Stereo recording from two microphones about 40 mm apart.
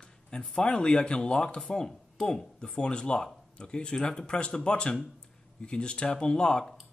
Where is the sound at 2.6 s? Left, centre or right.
Left.